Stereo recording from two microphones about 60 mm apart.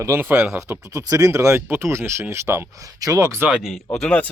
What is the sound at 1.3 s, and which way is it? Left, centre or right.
Speech, right.